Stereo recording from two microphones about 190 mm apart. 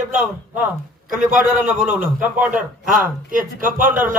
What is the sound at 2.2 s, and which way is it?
Speech, 10° right (ahead or behind).